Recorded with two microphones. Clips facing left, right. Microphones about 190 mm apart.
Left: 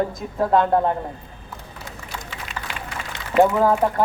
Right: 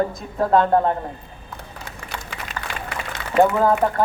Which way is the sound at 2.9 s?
70° right (ahead or behind).